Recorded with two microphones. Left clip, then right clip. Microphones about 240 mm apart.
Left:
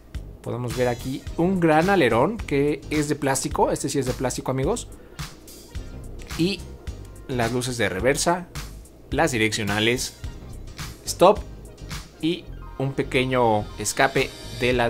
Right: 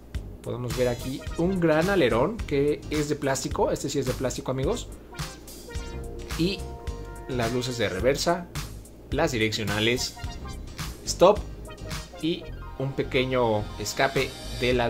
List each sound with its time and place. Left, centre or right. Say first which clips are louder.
0.5 s speech: left 3 dB; centre
0.9 s speech: left 2 dB; centre
1.3 s speech: left 4 dB; centre
6.4 s speech: left 3 dB; centre
11.1 s music: left 2 dB; centre
12.2 s speech: left 4 dB; centre